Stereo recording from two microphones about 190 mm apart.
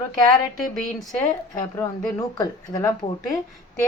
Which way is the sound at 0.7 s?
Centre (ahead or behind).